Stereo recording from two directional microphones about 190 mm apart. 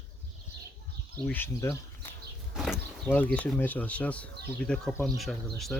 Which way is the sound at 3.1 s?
10° left (ahead or behind).